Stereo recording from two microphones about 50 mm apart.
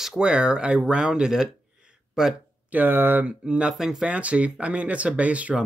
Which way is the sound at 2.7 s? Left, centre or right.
Right.